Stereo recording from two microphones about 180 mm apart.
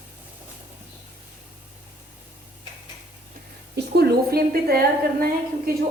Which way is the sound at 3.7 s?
60° right (ahead or behind).